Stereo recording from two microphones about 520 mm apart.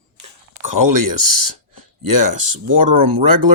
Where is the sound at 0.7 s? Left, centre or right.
Right.